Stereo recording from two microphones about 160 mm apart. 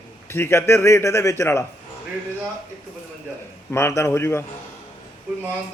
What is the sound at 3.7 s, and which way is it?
Speech, 15° left (ahead or behind).